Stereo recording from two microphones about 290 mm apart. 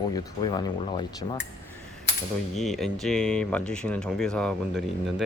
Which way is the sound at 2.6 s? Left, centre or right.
Centre.